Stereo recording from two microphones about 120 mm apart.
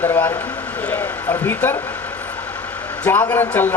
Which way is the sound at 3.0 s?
15° left (ahead or behind).